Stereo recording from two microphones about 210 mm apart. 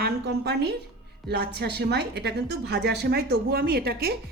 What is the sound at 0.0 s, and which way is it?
A woman's voice, 50° right (ahead or behind).